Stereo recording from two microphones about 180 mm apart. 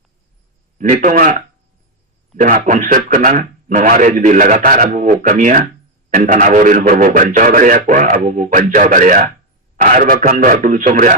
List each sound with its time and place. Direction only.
0.8 s a man's voice: 45° right (ahead or behind)